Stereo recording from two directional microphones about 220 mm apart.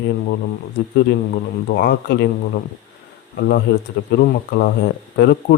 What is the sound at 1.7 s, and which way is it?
Speech, 45° left (ahead or behind).